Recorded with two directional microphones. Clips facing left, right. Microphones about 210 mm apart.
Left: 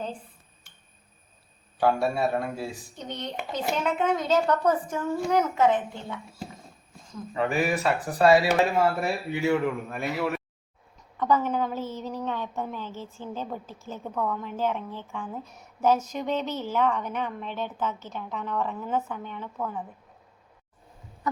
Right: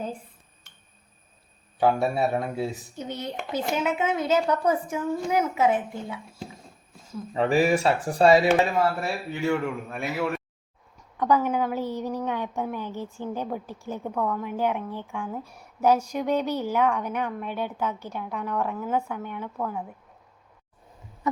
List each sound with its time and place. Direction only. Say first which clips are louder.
1.8 s speech: right 1 dB; 20° right (ahead or behind)
3.0 s a woman's voice: right 2 dB; 5° right (ahead or behind)
7.3 s speech: right 4 dB; 30° right (ahead or behind)
8.7 s speech: left 1 dB; 10° left (ahead or behind)
11.2 s a woman's voice: right 2 dB; 10° right (ahead or behind)